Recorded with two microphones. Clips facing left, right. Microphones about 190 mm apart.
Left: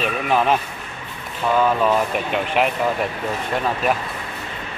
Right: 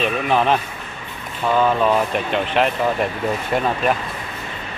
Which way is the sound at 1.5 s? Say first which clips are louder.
Right 1 dB; 5° left (ahead or behind).